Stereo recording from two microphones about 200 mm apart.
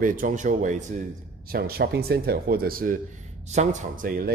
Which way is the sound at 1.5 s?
50° right (ahead or behind).